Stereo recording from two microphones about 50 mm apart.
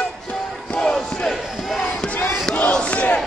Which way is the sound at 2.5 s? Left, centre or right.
Centre.